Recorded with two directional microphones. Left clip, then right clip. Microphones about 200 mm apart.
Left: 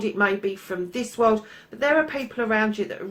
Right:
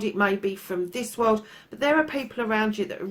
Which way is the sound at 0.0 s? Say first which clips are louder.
Left 1 dB; 50° right (ahead or behind).